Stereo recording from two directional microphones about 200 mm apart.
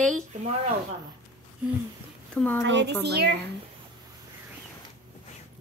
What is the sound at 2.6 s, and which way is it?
Speech, 60° right (ahead or behind).